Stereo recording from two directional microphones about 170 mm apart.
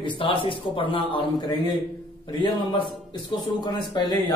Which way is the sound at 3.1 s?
25° left (ahead or behind).